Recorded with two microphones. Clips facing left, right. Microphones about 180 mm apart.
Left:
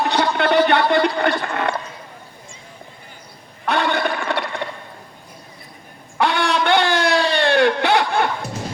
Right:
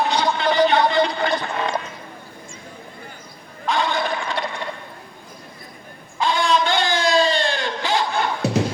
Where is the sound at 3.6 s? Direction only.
65° left (ahead or behind).